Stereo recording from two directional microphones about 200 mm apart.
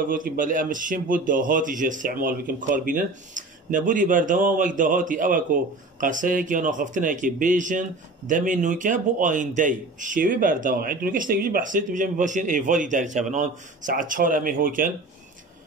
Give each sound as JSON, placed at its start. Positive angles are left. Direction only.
{"t": 0.1, "sound": "a man's voice", "side_deg": -40}